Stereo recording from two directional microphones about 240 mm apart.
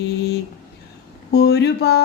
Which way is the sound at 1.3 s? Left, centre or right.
Left.